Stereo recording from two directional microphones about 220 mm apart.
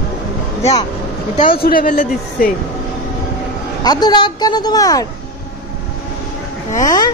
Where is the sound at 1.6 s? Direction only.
40° left (ahead or behind).